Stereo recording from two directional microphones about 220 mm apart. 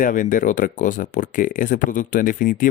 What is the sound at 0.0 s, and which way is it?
Speech, 35° left (ahead or behind).